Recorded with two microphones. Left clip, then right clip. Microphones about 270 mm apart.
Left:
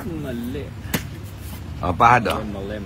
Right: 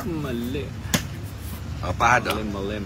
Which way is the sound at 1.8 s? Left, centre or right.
Left.